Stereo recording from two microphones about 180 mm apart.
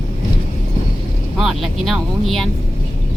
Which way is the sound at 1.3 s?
Centre (ahead or behind).